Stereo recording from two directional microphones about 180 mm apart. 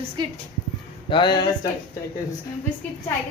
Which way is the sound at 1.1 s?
25° left (ahead or behind).